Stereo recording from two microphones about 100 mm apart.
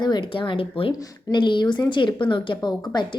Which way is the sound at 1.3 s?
50° left (ahead or behind).